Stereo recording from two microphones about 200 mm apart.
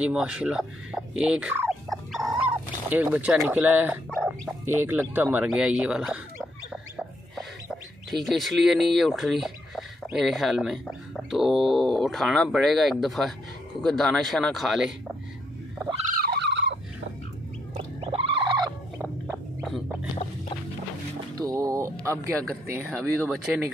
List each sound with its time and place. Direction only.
0.0 s speech: 5° right (ahead or behind)
16.2 s fowl: 55° right (ahead or behind)
18.0 s a sound: 25° right (ahead or behind)
18.9 s a sound: 10° right (ahead or behind)
21.4 s liquid: 15° right (ahead or behind)
22.5 s speech: 10° right (ahead or behind)
23.1 s speech: centre (ahead or behind)